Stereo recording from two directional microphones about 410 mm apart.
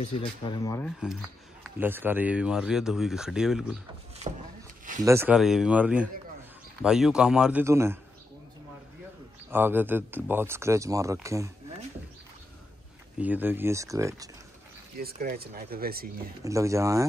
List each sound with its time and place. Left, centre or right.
0.0 s speech: centre
4.2 s speech: centre
9.5 s speech: centre
13.2 s speech: centre
15.0 s speech: right
16.4 s speech: centre